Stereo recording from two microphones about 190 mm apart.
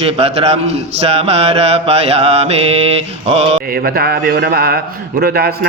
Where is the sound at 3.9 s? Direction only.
55° right (ahead or behind).